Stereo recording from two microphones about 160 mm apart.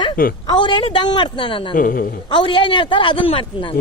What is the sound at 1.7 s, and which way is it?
Speech, 60° left (ahead or behind).